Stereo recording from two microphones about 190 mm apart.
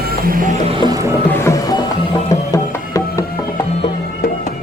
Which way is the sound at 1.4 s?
20° left (ahead or behind).